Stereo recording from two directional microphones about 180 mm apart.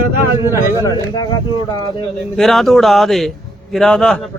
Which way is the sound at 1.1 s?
25° left (ahead or behind).